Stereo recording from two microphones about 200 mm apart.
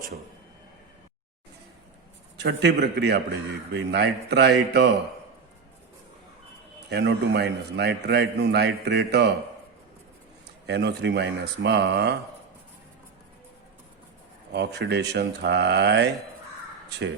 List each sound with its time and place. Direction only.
2.4 s a man's voice: 60° right (ahead or behind)
6.9 s a man's voice: 55° right (ahead or behind)
10.7 s a man's voice: 60° right (ahead or behind)
14.5 s a man's voice: 55° right (ahead or behind)